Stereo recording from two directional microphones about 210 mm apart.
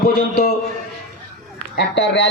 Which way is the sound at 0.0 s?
45° left (ahead or behind).